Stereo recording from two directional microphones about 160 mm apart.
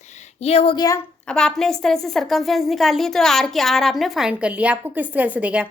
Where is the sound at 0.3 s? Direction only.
40° left (ahead or behind).